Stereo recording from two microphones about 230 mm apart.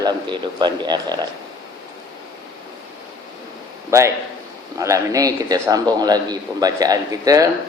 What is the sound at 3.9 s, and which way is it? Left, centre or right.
A man's voice, centre.